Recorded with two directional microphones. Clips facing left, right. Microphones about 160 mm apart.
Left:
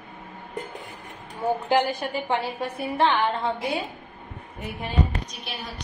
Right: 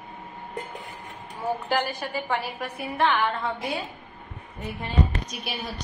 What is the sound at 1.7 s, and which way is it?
A woman's voice, 20° left (ahead or behind).